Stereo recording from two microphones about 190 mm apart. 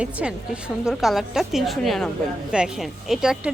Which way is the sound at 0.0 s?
5° right (ahead or behind).